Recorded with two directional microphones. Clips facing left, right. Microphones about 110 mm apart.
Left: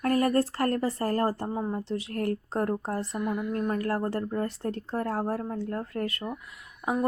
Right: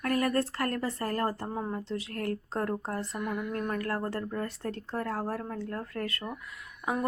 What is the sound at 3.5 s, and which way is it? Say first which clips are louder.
Speech: left 4 dB; 25° left (ahead or behind).